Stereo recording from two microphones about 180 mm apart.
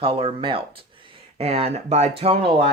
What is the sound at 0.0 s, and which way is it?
Speech, 35° right (ahead or behind).